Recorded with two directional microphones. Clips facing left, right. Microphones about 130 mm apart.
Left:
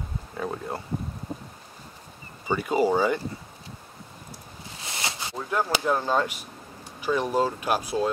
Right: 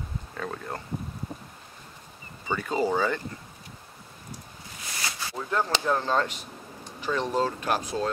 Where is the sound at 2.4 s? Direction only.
10° left (ahead or behind).